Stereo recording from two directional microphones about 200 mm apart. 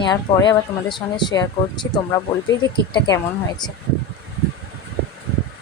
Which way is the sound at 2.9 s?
20° left (ahead or behind).